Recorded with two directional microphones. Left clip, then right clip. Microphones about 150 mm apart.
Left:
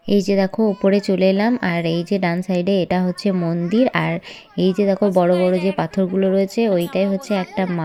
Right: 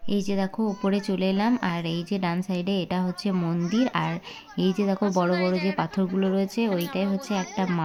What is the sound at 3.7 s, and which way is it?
A woman's voice, 25° left (ahead or behind).